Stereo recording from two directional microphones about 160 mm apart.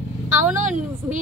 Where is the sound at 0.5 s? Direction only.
50° right (ahead or behind).